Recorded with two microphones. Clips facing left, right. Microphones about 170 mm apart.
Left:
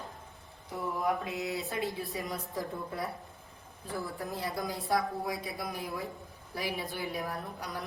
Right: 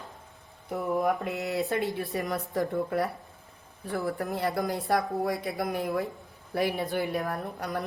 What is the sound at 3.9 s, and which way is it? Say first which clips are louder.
Speech: right 7 dB; 65° right (ahead or behind).